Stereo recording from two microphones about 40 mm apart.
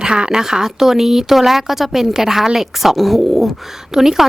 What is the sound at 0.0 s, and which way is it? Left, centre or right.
Speech, right.